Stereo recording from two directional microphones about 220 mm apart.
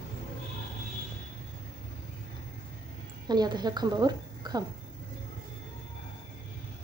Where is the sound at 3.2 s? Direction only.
20° right (ahead or behind).